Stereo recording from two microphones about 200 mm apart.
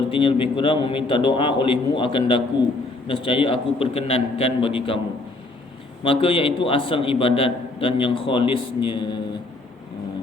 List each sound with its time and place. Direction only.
0.1 s a man's voice: 25° left (ahead or behind)
6.0 s a man's voice: 25° left (ahead or behind)